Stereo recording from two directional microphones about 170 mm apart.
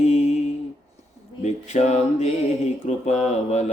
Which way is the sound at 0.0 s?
40° left (ahead or behind).